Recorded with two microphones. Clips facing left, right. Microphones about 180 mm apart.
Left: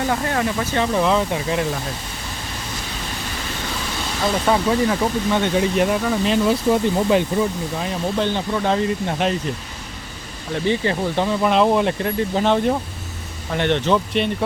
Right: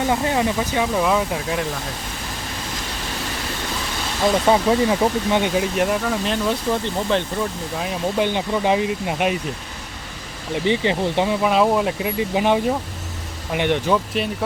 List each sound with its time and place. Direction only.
0.1 s speech: 20° right (ahead or behind); by 1.6 s centre (ahead or behind)
4.4 s speech: 15° right (ahead or behind)
5.5 s speech: centre (ahead or behind)
8.2 s speech: 15° right (ahead or behind)
10.5 s speech: 15° right (ahead or behind)
11.4 s speech: centre (ahead or behind)